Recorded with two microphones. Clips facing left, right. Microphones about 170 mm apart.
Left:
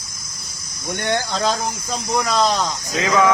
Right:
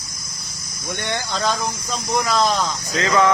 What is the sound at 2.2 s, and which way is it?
Speech, centre (ahead or behind).